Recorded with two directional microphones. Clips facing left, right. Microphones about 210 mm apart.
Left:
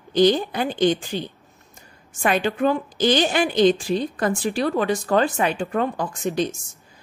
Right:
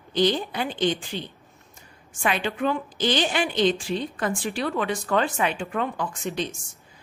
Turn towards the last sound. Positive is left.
turn(degrees=40)  # may be behind; listen again after turning